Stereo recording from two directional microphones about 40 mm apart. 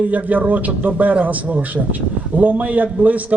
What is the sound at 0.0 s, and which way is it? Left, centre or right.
A man's voice, right.